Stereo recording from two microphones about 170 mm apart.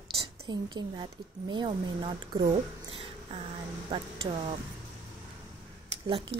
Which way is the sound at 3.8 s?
30° right (ahead or behind).